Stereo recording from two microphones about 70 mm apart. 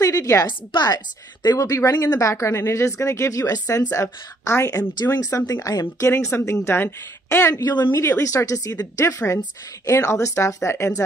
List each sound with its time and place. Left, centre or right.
0.0 s a woman's voice: left
0.5 s a woman's voice: left
7.5 s a woman's voice: left
8.2 s a woman's voice: left